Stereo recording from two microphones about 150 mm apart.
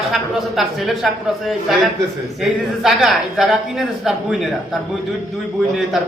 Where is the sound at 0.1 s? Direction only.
Centre (ahead or behind).